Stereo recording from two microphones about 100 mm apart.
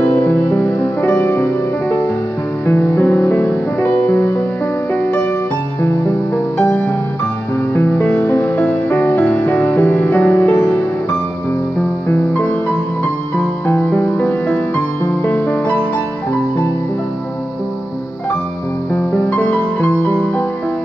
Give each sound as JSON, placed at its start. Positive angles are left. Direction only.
{"t": 0.0, "sound": "music", "side_deg": 20}
{"t": 5.8, "sound": "music", "side_deg": 20}
{"t": 12.1, "sound": "music", "side_deg": 20}
{"t": 19.1, "sound": "music", "side_deg": 20}